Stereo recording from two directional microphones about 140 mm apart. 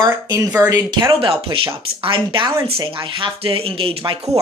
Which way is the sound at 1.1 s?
40° right (ahead or behind).